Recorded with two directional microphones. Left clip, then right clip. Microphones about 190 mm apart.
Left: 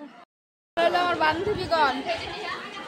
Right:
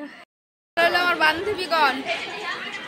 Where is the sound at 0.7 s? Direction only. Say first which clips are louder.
Right 3 dB; 5° right (ahead or behind).